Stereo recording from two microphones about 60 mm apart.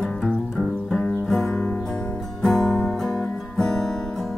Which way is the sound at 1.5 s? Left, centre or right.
Left.